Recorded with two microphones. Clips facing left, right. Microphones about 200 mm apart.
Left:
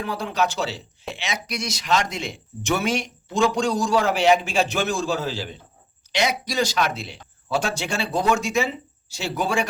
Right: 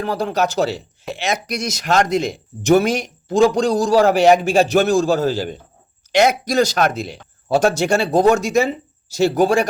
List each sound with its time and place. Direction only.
0.0 s speech: 40° right (ahead or behind)